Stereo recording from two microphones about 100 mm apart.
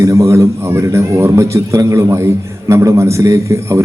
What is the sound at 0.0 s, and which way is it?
A man's voice, 30° right (ahead or behind).